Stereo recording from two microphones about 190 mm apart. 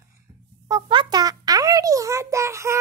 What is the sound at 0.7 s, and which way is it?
Speech, 25° right (ahead or behind).